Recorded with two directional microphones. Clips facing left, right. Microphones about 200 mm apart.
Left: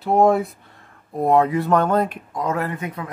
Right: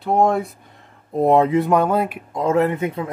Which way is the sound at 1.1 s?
25° right (ahead or behind).